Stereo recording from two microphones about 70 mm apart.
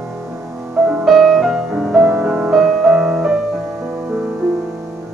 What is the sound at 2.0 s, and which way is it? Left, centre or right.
Music, right.